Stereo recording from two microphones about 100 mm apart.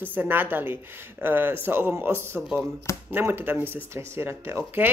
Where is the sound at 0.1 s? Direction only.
20° right (ahead or behind).